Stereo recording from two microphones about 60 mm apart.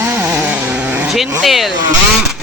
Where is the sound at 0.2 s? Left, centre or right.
Right.